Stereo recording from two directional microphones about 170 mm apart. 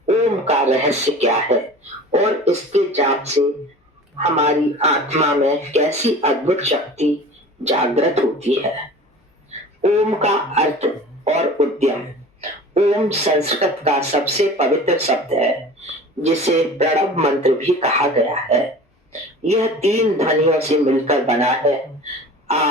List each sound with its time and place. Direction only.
0.0 s speech: 40° right (ahead or behind)